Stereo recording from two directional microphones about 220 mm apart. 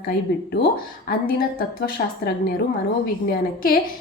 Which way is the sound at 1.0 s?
45° left (ahead or behind).